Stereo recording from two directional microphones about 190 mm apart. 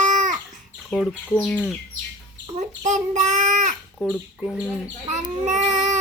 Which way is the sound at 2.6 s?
40° right (ahead or behind).